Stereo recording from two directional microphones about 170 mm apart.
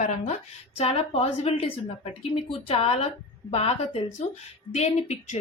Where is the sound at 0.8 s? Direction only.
35° left (ahead or behind).